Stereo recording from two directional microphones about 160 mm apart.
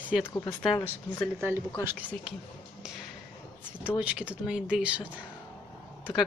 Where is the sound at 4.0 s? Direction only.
10° right (ahead or behind).